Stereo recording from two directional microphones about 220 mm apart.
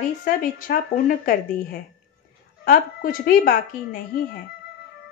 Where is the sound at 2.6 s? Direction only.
40° left (ahead or behind).